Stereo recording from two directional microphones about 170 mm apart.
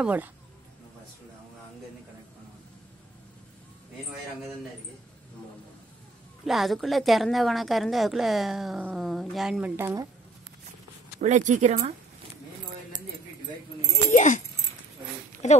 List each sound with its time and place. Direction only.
0.0 s speech: 10° right (ahead or behind)
6.4 s a woman's voice: centre (ahead or behind)
11.1 s speech: 45° right (ahead or behind)
14.1 s speech: 45° left (ahead or behind)
15.4 s speech: 45° left (ahead or behind)